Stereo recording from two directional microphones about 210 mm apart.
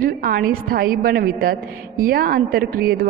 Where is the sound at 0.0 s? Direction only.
45° right (ahead or behind).